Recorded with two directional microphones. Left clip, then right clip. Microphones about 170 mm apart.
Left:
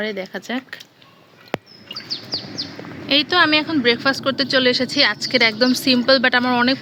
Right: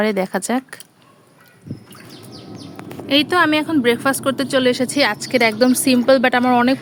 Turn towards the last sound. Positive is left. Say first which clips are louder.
# right 2 dB
turn(degrees=-20)  # may be behind; listen again after turning